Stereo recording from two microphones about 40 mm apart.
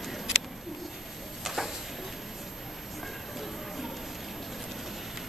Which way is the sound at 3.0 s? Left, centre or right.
Centre.